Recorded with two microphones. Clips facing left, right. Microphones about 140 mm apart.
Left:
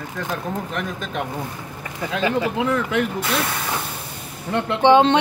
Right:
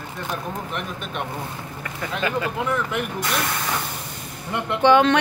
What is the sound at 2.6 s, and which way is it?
Speech, 90° left.